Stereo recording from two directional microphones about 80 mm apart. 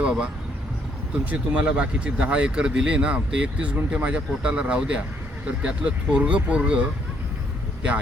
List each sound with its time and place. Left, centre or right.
0.0 s speech: centre
1.3 s speech: centre